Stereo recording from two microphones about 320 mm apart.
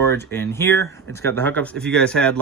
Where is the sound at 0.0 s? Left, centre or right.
Centre.